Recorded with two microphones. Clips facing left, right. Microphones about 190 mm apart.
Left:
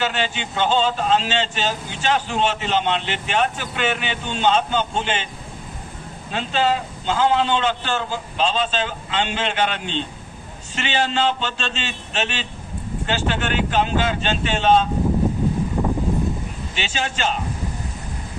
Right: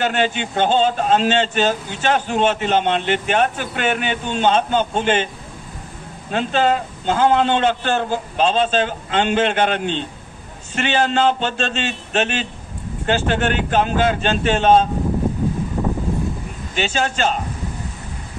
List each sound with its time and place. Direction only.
0.0 s speech: 50° right (ahead or behind)
6.3 s speech: 50° right (ahead or behind)
16.7 s speech: 45° right (ahead or behind)